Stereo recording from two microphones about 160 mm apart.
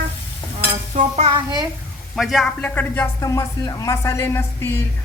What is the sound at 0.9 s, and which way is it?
Stir, 45° right (ahead or behind).